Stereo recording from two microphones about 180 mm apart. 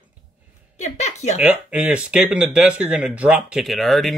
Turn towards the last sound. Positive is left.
turn(degrees=0)  # may be behind; listen again after turning